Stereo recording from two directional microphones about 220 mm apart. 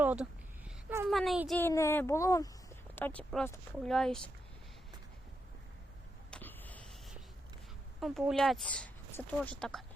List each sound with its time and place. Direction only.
0.0 s a woman's voice: 5° right (ahead or behind)
6.3 s vehicle: 10° left (ahead or behind)
8.0 s speech: centre (ahead or behind)